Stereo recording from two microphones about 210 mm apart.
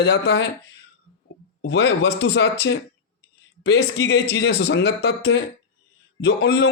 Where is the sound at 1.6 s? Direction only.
55° left (ahead or behind).